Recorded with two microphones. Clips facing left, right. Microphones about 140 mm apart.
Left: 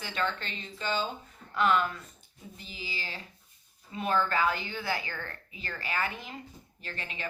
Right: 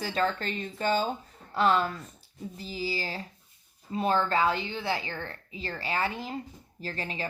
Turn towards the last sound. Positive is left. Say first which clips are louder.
# right 6 dB
turn(degrees=-35)  # may be behind; listen again after turning